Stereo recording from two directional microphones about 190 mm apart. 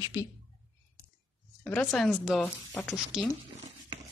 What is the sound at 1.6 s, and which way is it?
Speech, 5° left (ahead or behind).